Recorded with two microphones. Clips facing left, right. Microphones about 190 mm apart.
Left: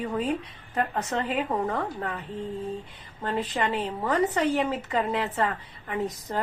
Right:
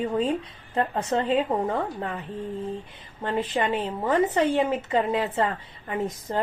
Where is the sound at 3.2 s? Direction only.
20° right (ahead or behind).